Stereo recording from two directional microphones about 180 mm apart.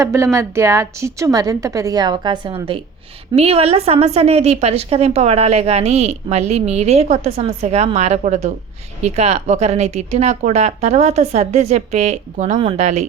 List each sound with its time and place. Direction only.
0.0 s a woman's voice: 15° right (ahead or behind); by 13.1 s 35° right (ahead or behind)